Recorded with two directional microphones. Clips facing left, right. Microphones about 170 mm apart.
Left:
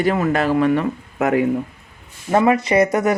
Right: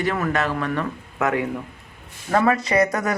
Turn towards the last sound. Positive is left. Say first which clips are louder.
# left 4 dB
turn(degrees=25)  # may be behind; listen again after turning